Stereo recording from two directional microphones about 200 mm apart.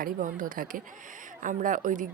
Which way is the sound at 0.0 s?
40° right (ahead or behind).